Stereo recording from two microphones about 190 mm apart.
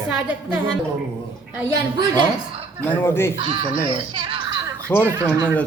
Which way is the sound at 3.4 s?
25° right (ahead or behind).